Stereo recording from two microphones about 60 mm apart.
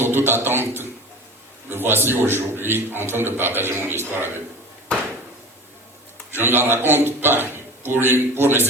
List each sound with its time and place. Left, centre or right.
0.0 s a sound: right
1.7 s a man's voice: right
6.3 s a man's voice: right